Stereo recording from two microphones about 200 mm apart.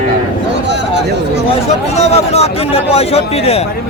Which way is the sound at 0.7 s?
60° right (ahead or behind).